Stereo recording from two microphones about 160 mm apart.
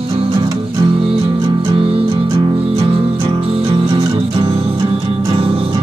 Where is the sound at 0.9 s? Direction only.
35° right (ahead or behind).